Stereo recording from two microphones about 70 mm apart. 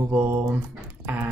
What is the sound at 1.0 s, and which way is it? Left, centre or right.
Dog, right.